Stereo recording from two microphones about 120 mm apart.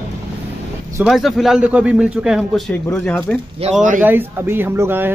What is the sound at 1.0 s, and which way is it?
A man's voice, centre (ahead or behind).